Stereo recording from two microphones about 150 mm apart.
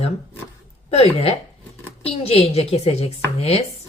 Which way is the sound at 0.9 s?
40° left (ahead or behind).